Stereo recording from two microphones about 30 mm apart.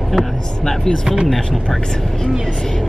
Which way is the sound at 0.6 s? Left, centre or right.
Centre.